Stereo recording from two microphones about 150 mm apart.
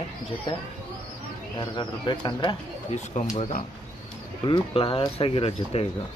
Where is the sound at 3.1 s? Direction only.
50° left (ahead or behind).